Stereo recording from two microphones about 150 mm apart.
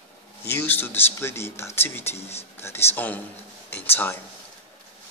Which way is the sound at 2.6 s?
15° left (ahead or behind).